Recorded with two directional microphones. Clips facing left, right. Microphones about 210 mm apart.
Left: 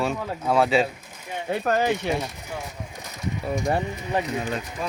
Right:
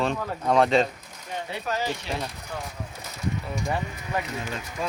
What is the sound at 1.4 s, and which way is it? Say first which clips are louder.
Speech: left 8 dB; 50° left (ahead or behind).